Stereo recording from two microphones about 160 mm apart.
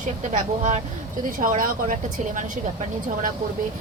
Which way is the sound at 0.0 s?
50° right (ahead or behind).